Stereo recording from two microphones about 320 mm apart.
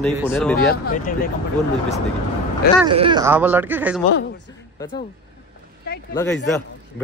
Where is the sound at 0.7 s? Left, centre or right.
Left.